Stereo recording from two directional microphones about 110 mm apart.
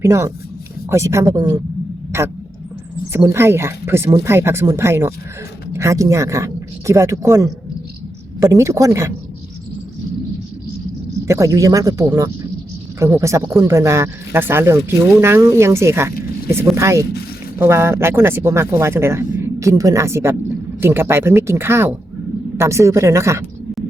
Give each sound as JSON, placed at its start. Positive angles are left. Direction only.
{"t": 0.0, "sound": "speech", "side_deg": -25}
{"t": 3.2, "sound": "speech", "side_deg": -20}
{"t": 11.3, "sound": "speech", "side_deg": -30}